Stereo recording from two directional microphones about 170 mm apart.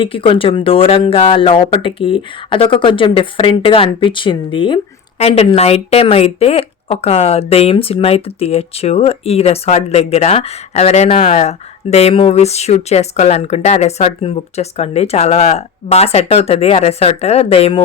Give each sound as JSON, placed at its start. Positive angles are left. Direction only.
{"t": 0.0, "sound": "speech", "side_deg": 30}